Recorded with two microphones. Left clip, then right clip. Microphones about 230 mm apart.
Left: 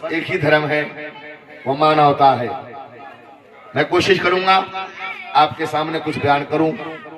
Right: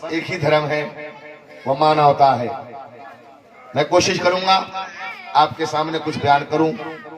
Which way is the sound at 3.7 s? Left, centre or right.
Right.